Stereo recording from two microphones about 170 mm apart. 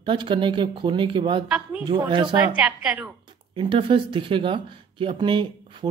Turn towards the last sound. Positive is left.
turn(degrees=-30)  # may be behind; listen again after turning